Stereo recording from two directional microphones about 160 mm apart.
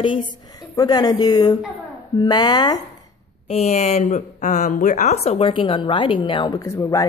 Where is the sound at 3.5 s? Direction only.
40° left (ahead or behind); by 7.0 s 20° left (ahead or behind).